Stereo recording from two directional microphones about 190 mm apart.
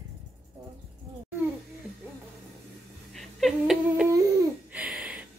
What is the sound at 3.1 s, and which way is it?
Whimper, centre (ahead or behind).